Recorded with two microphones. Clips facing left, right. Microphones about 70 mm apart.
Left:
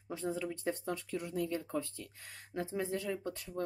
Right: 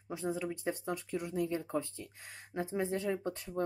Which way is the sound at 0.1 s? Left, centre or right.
Centre.